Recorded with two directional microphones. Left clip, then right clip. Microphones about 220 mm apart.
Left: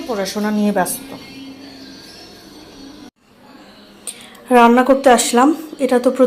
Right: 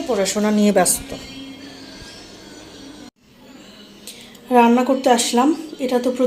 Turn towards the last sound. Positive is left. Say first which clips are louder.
# left 5 dB
turn(degrees=10)  # may be behind; listen again after turning